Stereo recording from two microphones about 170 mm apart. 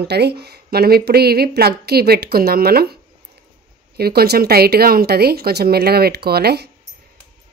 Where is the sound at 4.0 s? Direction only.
65° right (ahead or behind).